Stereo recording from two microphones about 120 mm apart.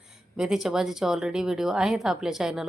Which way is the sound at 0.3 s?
5° right (ahead or behind).